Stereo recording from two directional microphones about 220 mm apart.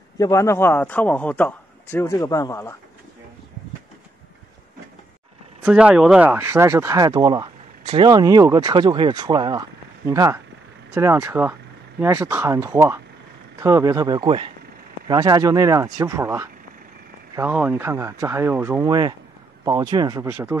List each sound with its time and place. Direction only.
0.2 s a man's voice: 15° left (ahead or behind)
5.6 s speech: 5° right (ahead or behind)